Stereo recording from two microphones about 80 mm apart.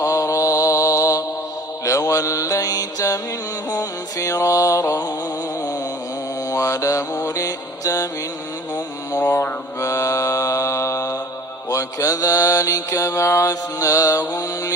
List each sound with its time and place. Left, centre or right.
0.0 s mantra: left
6.5 s mantra: left
9.2 s mantra: left
9.8 s mantra: left